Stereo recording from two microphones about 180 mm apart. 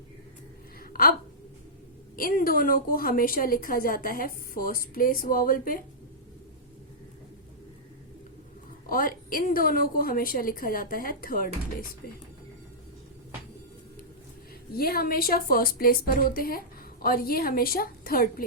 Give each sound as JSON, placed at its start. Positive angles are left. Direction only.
{"t": 0.8, "sound": "a sound", "side_deg": 55}
{"t": 2.1, "sound": "a woman's voice", "side_deg": 50}
{"t": 8.9, "sound": "a woman's voice", "side_deg": 55}
{"t": 14.8, "sound": "a woman's voice", "side_deg": 55}